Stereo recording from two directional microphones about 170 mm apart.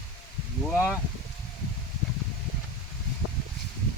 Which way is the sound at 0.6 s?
5° right (ahead or behind).